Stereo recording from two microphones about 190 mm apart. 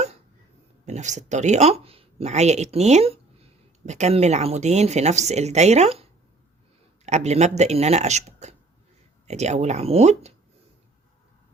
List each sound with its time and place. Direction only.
0.9 s speech: 40° right (ahead or behind)